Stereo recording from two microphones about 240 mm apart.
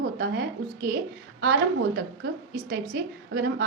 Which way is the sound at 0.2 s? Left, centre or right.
Right.